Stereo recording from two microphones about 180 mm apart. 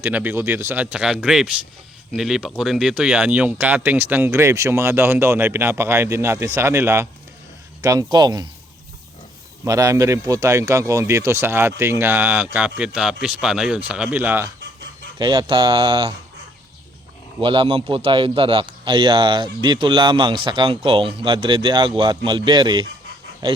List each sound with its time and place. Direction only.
0.0 s a man's voice: 10° right (ahead or behind)
9.6 s speech: 15° right (ahead or behind)
15.2 s a man's voice: 25° right (ahead or behind)
17.4 s a man's voice: 30° right (ahead or behind)